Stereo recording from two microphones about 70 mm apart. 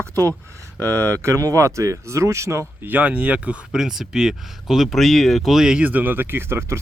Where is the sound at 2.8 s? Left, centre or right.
Right.